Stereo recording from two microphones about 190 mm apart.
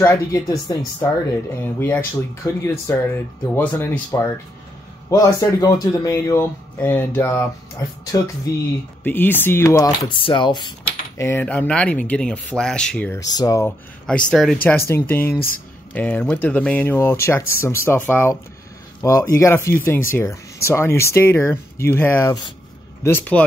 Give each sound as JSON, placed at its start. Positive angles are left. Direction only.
{"t": 0.0, "sound": "speech", "side_deg": 15}
{"t": 11.1, "sound": "speech", "side_deg": 10}
{"t": 13.3, "sound": "speech", "side_deg": 20}
{"t": 14.0, "sound": "speech", "side_deg": 5}
{"t": 15.3, "sound": "speech", "side_deg": 50}
{"t": 15.9, "sound": "speech", "side_deg": 10}
{"t": 19.3, "sound": "speech", "side_deg": 15}